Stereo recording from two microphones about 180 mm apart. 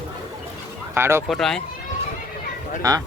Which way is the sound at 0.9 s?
15° right (ahead or behind).